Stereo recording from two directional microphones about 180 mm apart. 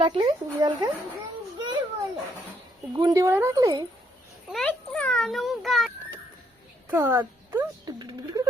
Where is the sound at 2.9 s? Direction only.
20° right (ahead or behind).